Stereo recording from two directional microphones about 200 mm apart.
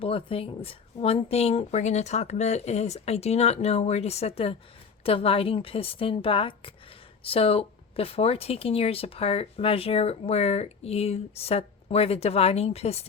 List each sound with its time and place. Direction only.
0.0 s a woman's voice: 25° left (ahead or behind)